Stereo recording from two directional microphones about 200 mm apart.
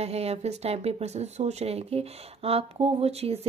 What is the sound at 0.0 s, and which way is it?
A woman's voice, 30° right (ahead or behind).